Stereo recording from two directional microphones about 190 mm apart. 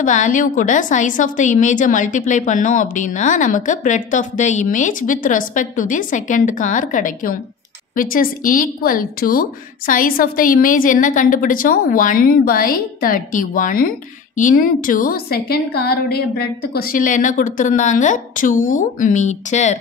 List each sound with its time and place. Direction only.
0.0 s a woman's voice: 40° left (ahead or behind)